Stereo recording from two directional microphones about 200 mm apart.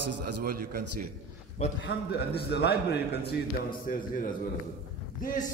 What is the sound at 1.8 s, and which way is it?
A man's voice, 55° left (ahead or behind).